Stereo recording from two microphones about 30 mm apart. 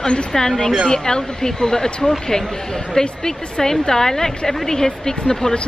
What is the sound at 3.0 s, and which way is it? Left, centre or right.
A woman's voice, centre.